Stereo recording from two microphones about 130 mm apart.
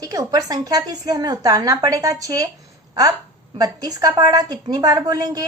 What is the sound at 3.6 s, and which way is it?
A woman's voice, 30° right (ahead or behind).